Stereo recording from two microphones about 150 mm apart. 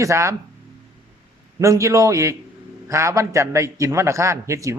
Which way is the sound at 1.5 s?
20° right (ahead or behind).